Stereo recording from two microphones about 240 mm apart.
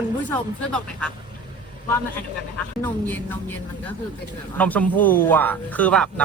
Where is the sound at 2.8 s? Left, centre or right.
Centre.